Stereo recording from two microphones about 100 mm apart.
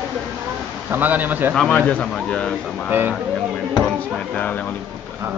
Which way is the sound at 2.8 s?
20° right (ahead or behind).